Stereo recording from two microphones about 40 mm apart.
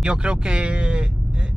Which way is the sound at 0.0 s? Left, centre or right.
Right.